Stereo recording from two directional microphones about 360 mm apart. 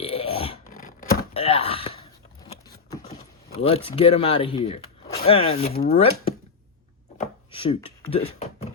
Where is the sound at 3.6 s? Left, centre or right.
Centre.